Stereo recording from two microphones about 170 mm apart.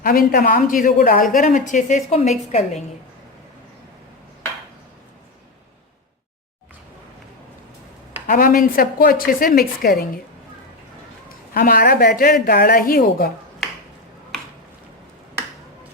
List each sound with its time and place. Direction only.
0.0 s speech: 60° left (ahead or behind); by 2.8 s 40° left (ahead or behind)
8.3 s a woman's voice: 55° left (ahead or behind)
11.3 s a woman's voice: 55° left (ahead or behind)